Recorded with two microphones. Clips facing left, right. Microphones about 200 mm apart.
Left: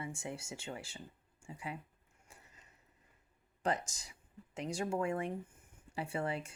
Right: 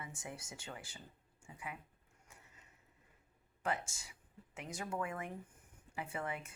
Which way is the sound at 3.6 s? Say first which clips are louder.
Left 4 dB; 35° left (ahead or behind).